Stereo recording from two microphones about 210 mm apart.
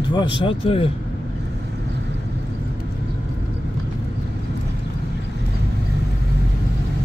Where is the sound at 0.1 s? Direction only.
25° left (ahead or behind).